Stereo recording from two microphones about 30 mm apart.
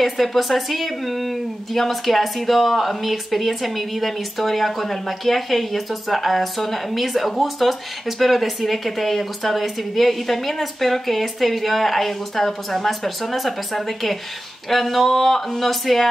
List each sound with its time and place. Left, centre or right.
0.0 s speech: centre